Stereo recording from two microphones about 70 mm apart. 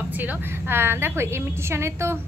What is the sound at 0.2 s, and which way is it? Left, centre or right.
A woman's voice, right.